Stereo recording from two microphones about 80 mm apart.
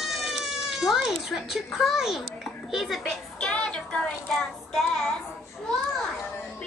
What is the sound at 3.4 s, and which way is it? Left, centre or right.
Child singing, centre.